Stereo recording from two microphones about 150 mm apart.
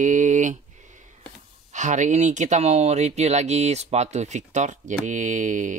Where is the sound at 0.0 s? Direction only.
55° right (ahead or behind).